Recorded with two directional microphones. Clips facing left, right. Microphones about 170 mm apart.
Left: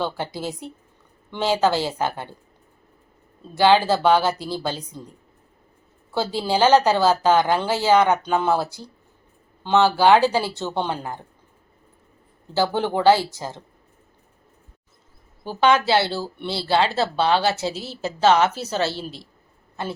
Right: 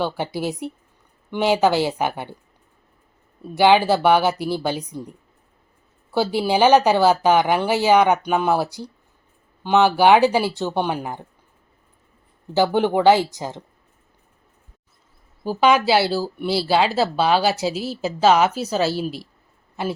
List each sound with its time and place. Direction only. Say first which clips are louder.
0.0 s speech: right 3 dB; 15° right (ahead or behind)
3.4 s speech: right 2 dB; 15° right (ahead or behind)
12.5 s speech: right 4 dB; 15° right (ahead or behind)
15.4 s speech: right 2 dB; 10° right (ahead or behind)